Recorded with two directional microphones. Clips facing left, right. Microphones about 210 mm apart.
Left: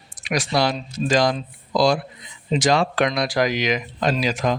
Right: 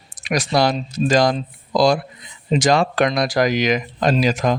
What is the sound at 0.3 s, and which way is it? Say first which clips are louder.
A man's voice: right 3 dB; 45° right (ahead or behind).